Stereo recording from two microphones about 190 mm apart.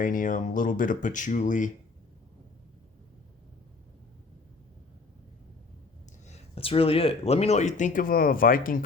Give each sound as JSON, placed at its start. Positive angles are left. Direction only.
{"t": 0.0, "sound": "speech", "side_deg": 45}
{"t": 6.2, "sound": "speech", "side_deg": 30}